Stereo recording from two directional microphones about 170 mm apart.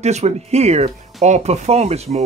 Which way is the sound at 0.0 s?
40° right (ahead or behind).